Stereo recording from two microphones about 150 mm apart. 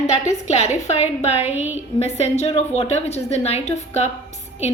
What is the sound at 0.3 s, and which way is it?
A woman's voice, 50° left (ahead or behind).